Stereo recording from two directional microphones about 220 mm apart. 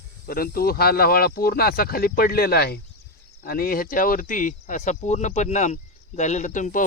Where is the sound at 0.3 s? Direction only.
40° left (ahead or behind).